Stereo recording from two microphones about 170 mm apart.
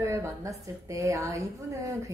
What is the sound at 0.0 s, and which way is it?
Speech, 15° right (ahead or behind).